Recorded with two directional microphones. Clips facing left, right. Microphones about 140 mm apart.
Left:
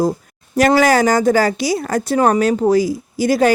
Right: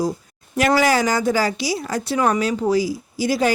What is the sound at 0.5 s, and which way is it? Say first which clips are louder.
A woman's voice: left 4 dB; 45° left (ahead or behind).